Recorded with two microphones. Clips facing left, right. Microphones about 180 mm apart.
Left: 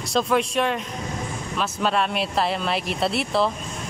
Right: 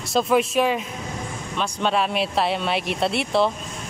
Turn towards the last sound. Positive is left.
turn(degrees=0)  # may be behind; listen again after turning